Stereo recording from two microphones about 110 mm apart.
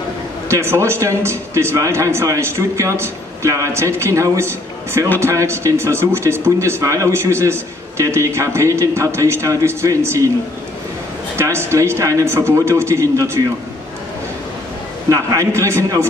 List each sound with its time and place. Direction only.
0.5 s speech: 25° right (ahead or behind)
11.3 s speech: 25° right (ahead or behind)
15.0 s speech: 30° right (ahead or behind)